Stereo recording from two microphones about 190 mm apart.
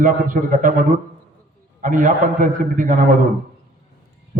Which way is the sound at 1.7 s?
45° right (ahead or behind).